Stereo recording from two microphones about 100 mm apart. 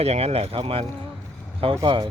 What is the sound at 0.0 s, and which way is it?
Speech, 90° right.